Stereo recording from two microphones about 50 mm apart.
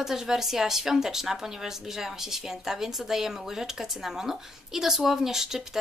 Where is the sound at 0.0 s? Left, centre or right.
Centre.